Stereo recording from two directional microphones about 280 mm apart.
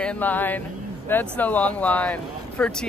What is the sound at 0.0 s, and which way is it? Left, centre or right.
Speech, centre.